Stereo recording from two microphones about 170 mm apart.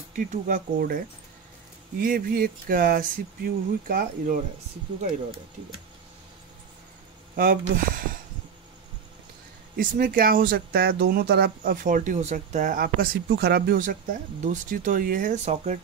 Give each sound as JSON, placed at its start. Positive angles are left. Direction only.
{"t": 0.1, "sound": "speech", "side_deg": -50}
{"t": 7.3, "sound": "speech", "side_deg": -55}
{"t": 9.8, "sound": "speech", "side_deg": -55}